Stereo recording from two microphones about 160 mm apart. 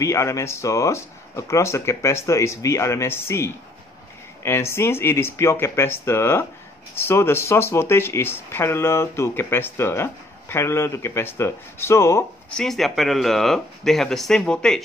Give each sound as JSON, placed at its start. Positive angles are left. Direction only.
{"t": 0.0, "sound": "speech", "side_deg": 20}
{"t": 12.4, "sound": "speech", "side_deg": 5}